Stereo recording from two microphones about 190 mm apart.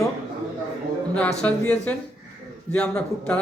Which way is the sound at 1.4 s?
5° left (ahead or behind).